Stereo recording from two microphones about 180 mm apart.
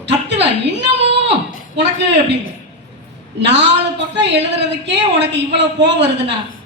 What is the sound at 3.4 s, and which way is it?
A woman's voice, 75° right (ahead or behind).